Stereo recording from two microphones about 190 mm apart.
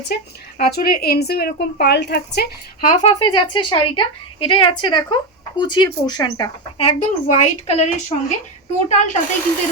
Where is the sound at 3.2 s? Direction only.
25° left (ahead or behind).